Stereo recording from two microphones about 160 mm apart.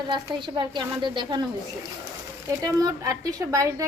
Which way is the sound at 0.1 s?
30° right (ahead or behind).